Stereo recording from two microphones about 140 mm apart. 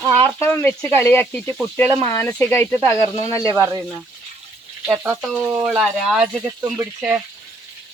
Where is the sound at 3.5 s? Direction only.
25° right (ahead or behind).